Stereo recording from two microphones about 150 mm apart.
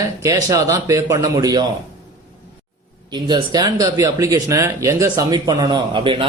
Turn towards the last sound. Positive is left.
turn(degrees=-35)  # may be behind; listen again after turning